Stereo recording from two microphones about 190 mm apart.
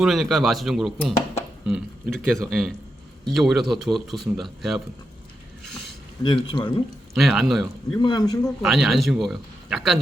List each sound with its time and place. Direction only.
0.0 s speech: centre (ahead or behind)
6.2 s speech: 25° left (ahead or behind)
7.1 s speech: centre (ahead or behind)
7.9 s speech: 20° left (ahead or behind)
8.6 s speech: centre (ahead or behind)